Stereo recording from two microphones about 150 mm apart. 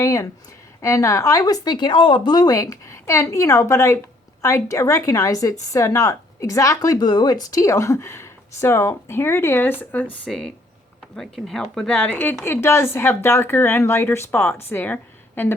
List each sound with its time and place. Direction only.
0.0 s a woman's voice: 20° left (ahead or behind)